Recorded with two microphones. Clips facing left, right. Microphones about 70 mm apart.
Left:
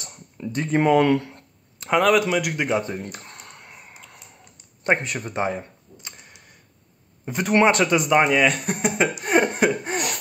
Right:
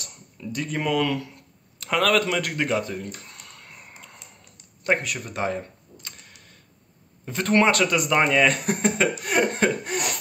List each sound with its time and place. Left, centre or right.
0.4 s speech: left
1.8 s speech: left
2.8 s speech: left
3.3 s a sound: left
3.7 s a sound: centre
4.8 s camera: left
7.2 s speech: centre
8.2 s speech: centre
8.9 s laughter: centre
9.9 s a sound: left